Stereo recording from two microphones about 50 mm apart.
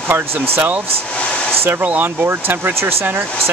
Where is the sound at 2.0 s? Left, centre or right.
Right.